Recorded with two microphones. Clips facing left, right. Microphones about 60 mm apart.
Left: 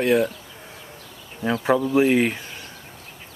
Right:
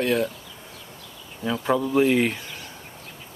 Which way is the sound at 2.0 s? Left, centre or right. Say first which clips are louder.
Left 1 dB; centre.